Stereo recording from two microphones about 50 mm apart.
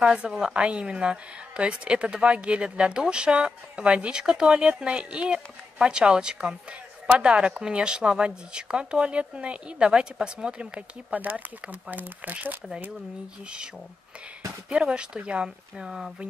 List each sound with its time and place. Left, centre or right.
0.0 s a woman's voice: right
11.1 s speech: right
14.7 s a woman's voice: centre